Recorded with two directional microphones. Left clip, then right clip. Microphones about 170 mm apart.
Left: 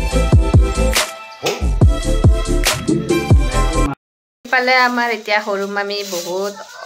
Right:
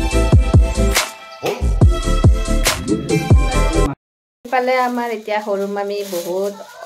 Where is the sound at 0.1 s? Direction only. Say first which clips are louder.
Left 2 dB; centre (ahead or behind).